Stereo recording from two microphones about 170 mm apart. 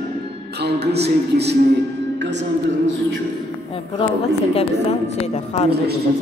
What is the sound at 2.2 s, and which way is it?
Music, 90° right.